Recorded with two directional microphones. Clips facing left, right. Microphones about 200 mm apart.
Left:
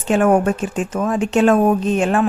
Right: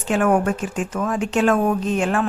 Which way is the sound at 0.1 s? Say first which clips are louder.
Left 4 dB; 25° left (ahead or behind).